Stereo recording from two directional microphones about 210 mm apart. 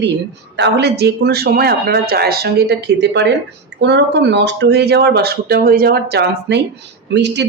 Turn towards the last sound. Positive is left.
turn(degrees=-55)  # may be behind; listen again after turning